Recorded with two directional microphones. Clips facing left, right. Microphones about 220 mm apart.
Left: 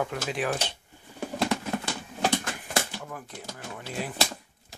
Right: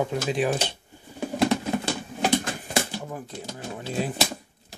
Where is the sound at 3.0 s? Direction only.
25° right (ahead or behind).